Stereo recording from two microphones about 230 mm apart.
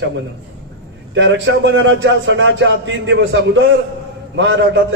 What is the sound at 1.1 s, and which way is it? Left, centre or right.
A man's voice, right.